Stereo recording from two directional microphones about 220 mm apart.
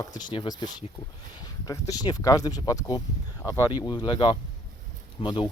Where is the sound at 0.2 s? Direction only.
20° left (ahead or behind).